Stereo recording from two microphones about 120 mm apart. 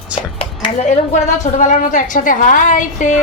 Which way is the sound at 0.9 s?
85° left.